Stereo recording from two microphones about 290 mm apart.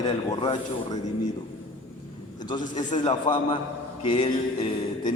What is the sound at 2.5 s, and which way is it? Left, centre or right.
A man's voice, left.